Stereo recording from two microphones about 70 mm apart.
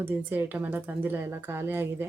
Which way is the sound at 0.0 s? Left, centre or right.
Right.